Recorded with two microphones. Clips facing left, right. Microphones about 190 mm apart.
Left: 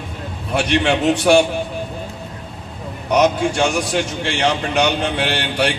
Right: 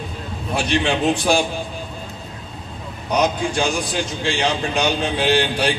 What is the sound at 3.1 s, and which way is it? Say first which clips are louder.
A man's voice: left 4 dB; 70° left (ahead or behind).